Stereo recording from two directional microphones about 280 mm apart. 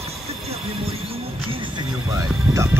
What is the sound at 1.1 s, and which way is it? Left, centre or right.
Music, centre.